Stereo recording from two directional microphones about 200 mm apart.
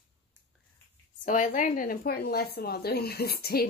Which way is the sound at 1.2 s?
40° left (ahead or behind).